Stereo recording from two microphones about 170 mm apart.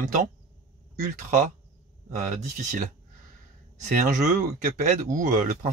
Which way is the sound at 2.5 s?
45° right (ahead or behind).